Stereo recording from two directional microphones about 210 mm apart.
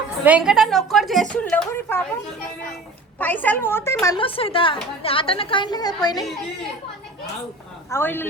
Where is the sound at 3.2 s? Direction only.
10° left (ahead or behind).